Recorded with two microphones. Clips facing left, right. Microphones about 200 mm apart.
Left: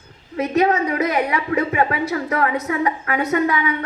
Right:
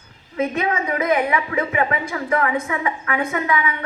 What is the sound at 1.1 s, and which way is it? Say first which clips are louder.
Speech: left 1 dB; 40° left (ahead or behind).